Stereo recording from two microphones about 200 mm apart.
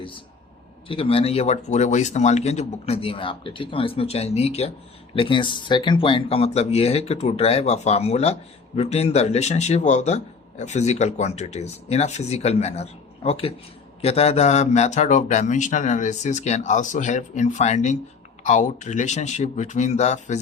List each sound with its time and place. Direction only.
0.9 s speech: 30° left (ahead or behind)